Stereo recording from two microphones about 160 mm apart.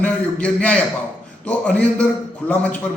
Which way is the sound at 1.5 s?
5° left (ahead or behind).